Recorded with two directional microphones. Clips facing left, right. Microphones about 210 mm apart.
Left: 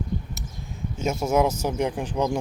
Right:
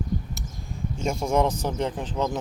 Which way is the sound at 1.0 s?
5° left (ahead or behind).